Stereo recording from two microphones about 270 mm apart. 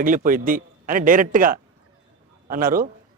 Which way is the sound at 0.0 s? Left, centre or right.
Right.